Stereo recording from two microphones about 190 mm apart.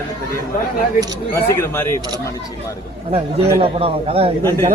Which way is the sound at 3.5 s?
30° right (ahead or behind).